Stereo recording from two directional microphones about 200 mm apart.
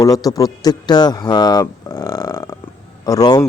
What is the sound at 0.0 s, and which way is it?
Speech, 20° left (ahead or behind).